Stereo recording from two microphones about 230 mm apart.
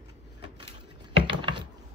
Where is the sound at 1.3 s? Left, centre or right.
Right.